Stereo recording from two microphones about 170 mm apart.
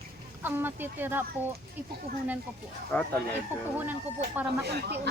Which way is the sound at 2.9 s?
10° left (ahead or behind).